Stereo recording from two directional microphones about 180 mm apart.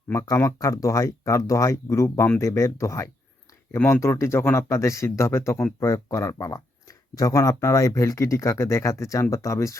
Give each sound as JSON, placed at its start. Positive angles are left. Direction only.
{"t": 0.1, "sound": "speech", "side_deg": 15}